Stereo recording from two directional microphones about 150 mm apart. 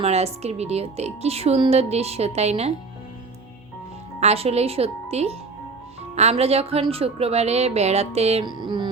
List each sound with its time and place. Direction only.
0.0 s speech: 45° right (ahead or behind)
4.2 s speech: 45° right (ahead or behind)
8.4 s speech: 30° right (ahead or behind)